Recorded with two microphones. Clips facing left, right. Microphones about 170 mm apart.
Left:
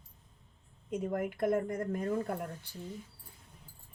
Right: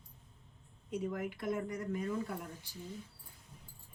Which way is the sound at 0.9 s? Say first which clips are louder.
Left 4 dB; 50° left (ahead or behind).